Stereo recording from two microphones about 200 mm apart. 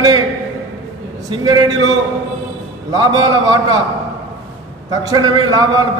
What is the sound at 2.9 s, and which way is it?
Speech, 20° right (ahead or behind).